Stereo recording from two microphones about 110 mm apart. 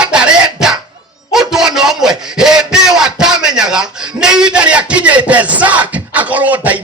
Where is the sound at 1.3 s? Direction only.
5° right (ahead or behind).